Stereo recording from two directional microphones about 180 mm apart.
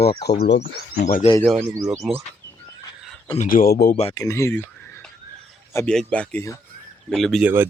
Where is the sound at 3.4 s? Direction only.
50° left (ahead or behind).